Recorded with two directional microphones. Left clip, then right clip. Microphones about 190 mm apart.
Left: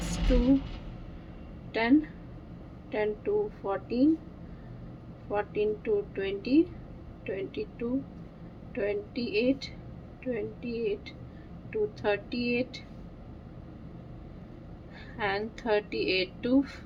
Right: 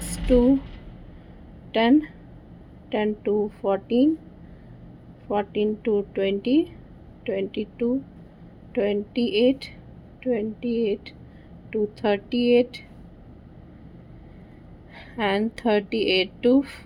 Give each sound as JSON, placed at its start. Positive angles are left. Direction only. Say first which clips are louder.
{"t": 1.7, "sound": "a woman's voice", "louder": "right 6 dB", "side_deg": -55}
{"t": 5.3, "sound": "a woman's voice", "louder": "right 5 dB", "side_deg": -50}
{"t": 14.9, "sound": "a woman's voice", "louder": "right 7 dB", "side_deg": -55}